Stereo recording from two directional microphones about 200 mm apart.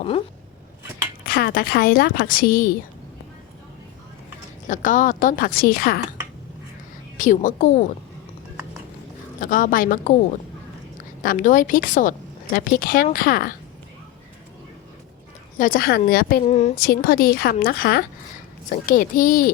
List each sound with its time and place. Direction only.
1.3 s a woman's voice: 50° left (ahead or behind)
4.7 s a woman's voice: 40° left (ahead or behind)
7.2 s a woman's voice: 40° left (ahead or behind)
9.4 s a woman's voice: 45° left (ahead or behind)
11.2 s a woman's voice: 45° left (ahead or behind)
15.5 s a woman's voice: 45° left (ahead or behind)
16.5 s a woman's voice: 35° left (ahead or behind)
16.7 s a woman's voice: 50° left (ahead or behind)